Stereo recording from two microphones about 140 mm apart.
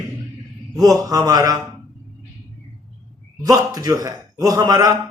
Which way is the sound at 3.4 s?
25° right (ahead or behind).